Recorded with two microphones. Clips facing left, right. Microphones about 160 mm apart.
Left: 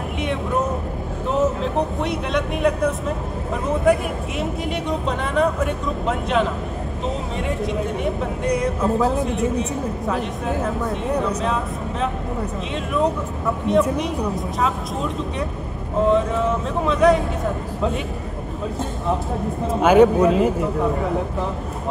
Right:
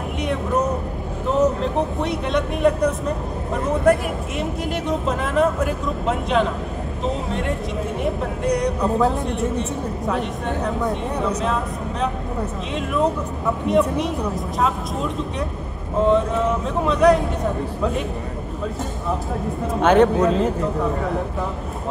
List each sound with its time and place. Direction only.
0.2 s vehicle: centre (ahead or behind)
1.3 s speech: centre (ahead or behind)
8.0 s speech: centre (ahead or behind)
13.7 s speech: centre (ahead or behind)
19.7 s speech: 5° left (ahead or behind)